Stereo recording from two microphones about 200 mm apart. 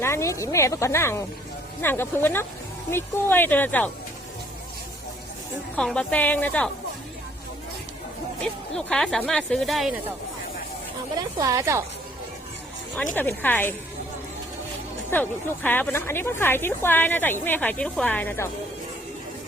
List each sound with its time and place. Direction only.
0.0 s speech: 15° left (ahead or behind)
5.7 s speech: 5° left (ahead or behind)
8.4 s speech: 5° left (ahead or behind)
11.2 s speech: 20° right (ahead or behind)
13.1 s speech: 10° left (ahead or behind)
15.1 s speech: 10° left (ahead or behind)